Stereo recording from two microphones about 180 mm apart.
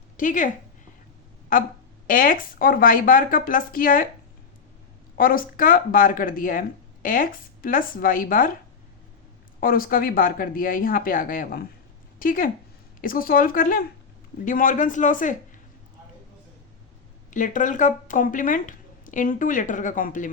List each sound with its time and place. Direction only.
0.2 s speech: 45° left (ahead or behind)
5.1 s speech: 50° left (ahead or behind)
9.6 s speech: 55° left (ahead or behind)
17.3 s speech: 45° left (ahead or behind)